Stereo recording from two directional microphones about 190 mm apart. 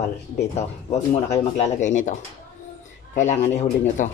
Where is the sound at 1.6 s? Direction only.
40° left (ahead or behind).